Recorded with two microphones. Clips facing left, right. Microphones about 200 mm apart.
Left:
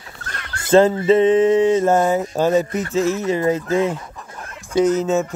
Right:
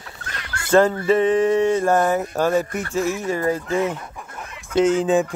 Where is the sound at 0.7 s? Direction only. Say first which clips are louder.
Left 3 dB; 20° left (ahead or behind).